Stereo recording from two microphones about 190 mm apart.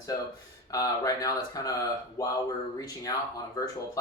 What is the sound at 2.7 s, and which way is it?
Speech, 20° left (ahead or behind).